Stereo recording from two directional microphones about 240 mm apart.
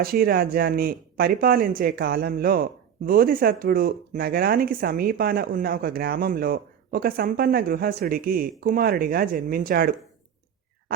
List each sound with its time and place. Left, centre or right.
0.0 s speech: right